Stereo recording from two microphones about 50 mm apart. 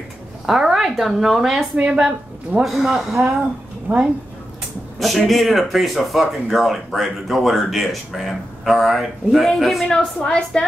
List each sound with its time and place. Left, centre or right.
0.5 s a woman's voice: centre
3.9 s speech: right
4.9 s speech: centre
9.9 s a woman's voice: centre